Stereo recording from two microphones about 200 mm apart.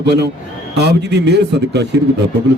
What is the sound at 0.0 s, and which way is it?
A man's voice, 55° right (ahead or behind).